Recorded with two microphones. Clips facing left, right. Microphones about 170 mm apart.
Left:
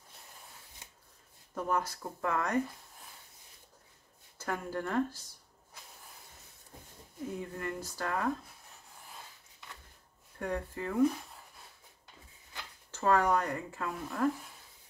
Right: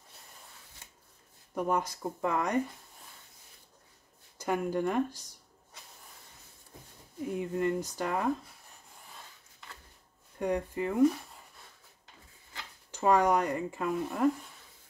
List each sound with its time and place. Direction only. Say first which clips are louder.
1.5 s speech: right 3 dB; 15° right (ahead or behind)
4.4 s speech: right 6 dB; 15° right (ahead or behind)
7.3 s speech: right 10 dB; 20° right (ahead or behind)
10.4 s speech: right 5 dB; 15° right (ahead or behind)
12.9 s speech: right 3 dB; 15° right (ahead or behind)